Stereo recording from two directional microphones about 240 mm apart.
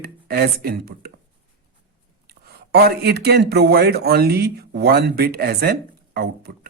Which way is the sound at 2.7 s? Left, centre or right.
Right.